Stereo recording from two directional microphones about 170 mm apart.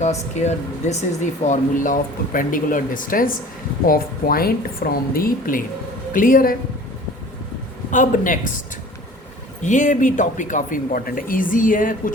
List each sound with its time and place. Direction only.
0.0 s a woman's voice: 40° left (ahead or behind)
7.9 s speech: 50° left (ahead or behind)
9.6 s speech: 45° left (ahead or behind)